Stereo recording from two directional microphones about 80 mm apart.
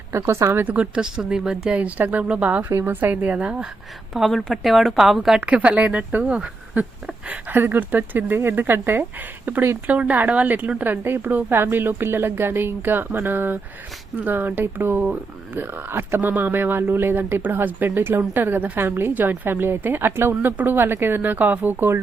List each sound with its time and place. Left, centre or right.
0.1 s speech: right
0.6 s speech: centre
4.1 s a woman's voice: centre
5.5 s speech: centre
7.3 s speech: right